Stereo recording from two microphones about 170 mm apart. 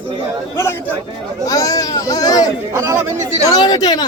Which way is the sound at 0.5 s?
15° left (ahead or behind).